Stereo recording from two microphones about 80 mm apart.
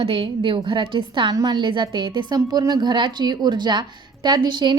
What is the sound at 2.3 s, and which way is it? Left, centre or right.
Speech, right.